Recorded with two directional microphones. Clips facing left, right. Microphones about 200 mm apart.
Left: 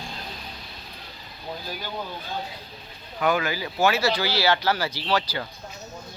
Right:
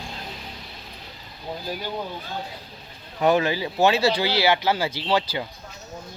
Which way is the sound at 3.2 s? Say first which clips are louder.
Right 4 dB; 30° right (ahead or behind).